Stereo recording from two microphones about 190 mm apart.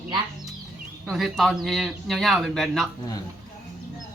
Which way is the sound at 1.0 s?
Centre (ahead or behind).